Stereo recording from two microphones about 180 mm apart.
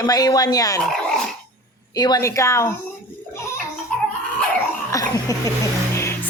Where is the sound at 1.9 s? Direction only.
20° left (ahead or behind).